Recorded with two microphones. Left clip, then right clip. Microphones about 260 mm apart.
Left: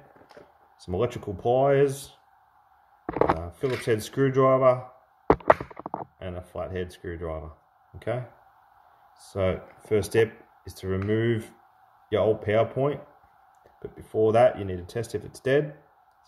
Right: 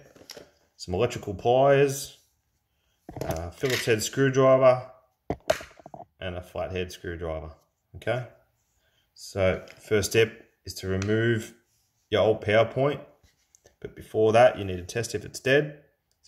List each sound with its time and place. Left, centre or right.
0.7 s speech: centre
5.2 s a sound: centre
5.5 s speech: centre